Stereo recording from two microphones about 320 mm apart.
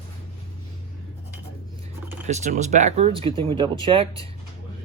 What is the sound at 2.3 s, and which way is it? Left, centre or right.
Speech, right.